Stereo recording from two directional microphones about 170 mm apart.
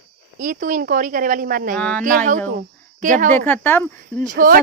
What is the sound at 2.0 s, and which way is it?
A woman's voice, 50° right (ahead or behind).